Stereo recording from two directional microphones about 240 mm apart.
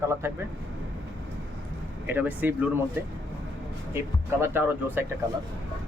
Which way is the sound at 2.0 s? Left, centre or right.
Centre.